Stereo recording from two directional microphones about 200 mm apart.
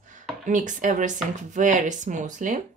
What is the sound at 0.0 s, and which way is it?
Speech, 40° right (ahead or behind).